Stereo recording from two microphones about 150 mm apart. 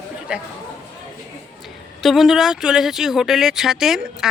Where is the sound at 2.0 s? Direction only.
Centre (ahead or behind).